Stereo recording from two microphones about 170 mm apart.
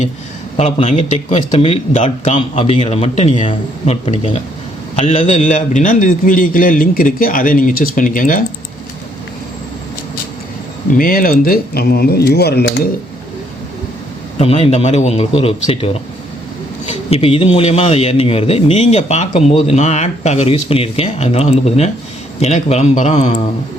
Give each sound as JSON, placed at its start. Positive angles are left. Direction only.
{"t": 0.5, "sound": "a man's voice", "side_deg": 35}
{"t": 10.9, "sound": "speech", "side_deg": 60}
{"t": 14.3, "sound": "a man's voice", "side_deg": 35}
{"t": 17.1, "sound": "a man's voice", "side_deg": 35}